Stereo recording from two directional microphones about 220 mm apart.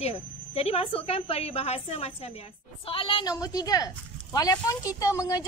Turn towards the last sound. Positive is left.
turn(degrees=15)  # may be behind; listen again after turning